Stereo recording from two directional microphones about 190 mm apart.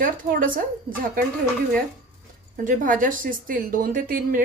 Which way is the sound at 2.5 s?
45° right (ahead or behind).